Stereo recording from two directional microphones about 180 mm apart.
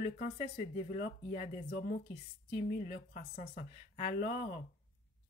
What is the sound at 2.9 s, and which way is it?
Speech, 50° left (ahead or behind).